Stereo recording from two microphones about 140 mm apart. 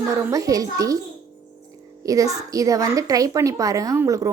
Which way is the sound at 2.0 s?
25° right (ahead or behind).